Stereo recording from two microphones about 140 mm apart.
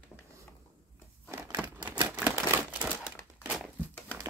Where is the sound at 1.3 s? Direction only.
20° right (ahead or behind).